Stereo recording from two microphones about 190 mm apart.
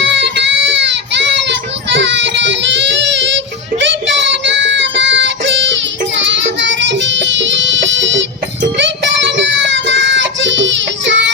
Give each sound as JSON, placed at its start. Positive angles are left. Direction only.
{"t": 0.0, "sound": "child singing", "side_deg": -65}
{"t": 6.2, "sound": "music", "side_deg": -70}
{"t": 8.8, "sound": "child singing", "side_deg": -70}